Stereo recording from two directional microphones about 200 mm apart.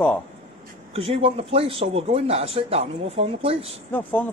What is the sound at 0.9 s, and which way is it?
Speech, 30° right (ahead or behind).